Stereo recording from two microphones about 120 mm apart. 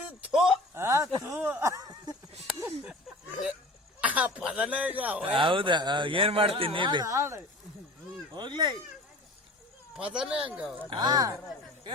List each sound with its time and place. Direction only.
0.3 s speech: 5° right (ahead or behind)
0.7 s speech: 20° right (ahead or behind)
4.0 s speech: 10° right (ahead or behind)
5.2 s a man's voice: 45° right (ahead or behind)
7.0 s speech: 25° right (ahead or behind)
8.3 s speech: 40° right (ahead or behind)
10.0 s speech: 10° right (ahead or behind)
10.8 s speech: 35° right (ahead or behind)